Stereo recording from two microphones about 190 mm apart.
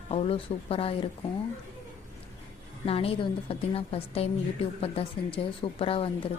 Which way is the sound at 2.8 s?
30° left (ahead or behind).